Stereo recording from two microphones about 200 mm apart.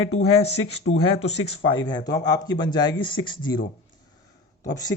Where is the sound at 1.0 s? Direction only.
30° left (ahead or behind).